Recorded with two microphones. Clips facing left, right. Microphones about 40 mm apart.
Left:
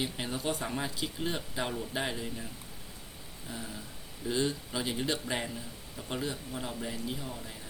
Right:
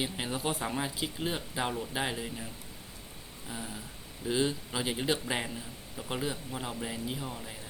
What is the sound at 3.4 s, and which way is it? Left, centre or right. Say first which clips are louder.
Speech: right 1 dB; centre.